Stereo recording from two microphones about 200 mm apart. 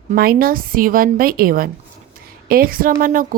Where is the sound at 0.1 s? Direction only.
45° right (ahead or behind).